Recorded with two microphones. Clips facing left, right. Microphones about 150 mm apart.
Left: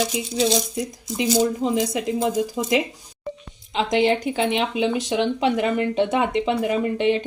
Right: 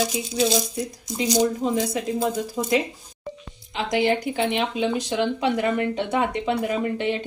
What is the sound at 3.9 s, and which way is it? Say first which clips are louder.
Speech: left 2 dB; 20° left (ahead or behind).